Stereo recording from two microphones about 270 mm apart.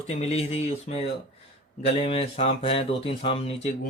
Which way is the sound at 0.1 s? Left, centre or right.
Left.